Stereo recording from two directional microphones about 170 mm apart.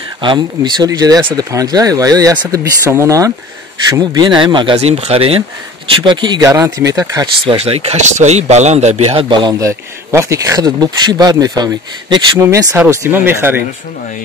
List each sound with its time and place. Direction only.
0.2 s a man's voice: 25° right (ahead or behind)
6.4 s a man's voice: 15° right (ahead or behind)
7.5 s a man's voice: 35° right (ahead or behind); by 13.7 s 10° right (ahead or behind)